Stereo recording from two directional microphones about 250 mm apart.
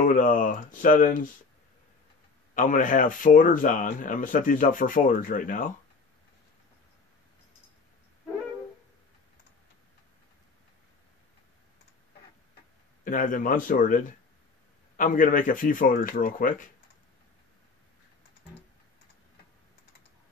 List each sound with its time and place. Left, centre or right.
0.0 s speech: left
2.5 s speech: left
13.0 s speech: left